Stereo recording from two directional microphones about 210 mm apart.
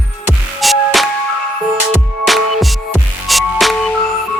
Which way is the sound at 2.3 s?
Centre (ahead or behind).